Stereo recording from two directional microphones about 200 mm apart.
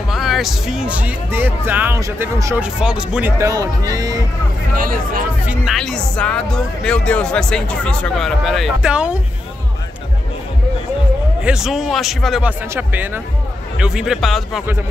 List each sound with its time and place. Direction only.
0.1 s speech: centre (ahead or behind); by 4.1 s 15° right (ahead or behind)
4.7 s speech: 45° right (ahead or behind)
5.5 s speech: centre (ahead or behind)
11.4 s speech: centre (ahead or behind)